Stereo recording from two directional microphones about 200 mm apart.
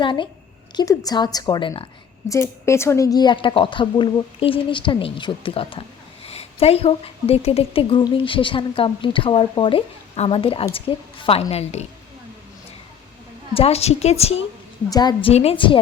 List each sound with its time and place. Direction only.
0.0 s a woman's voice: 25° left (ahead or behind)
13.5 s a woman's voice: 30° left (ahead or behind)
14.8 s a woman's voice: 20° left (ahead or behind)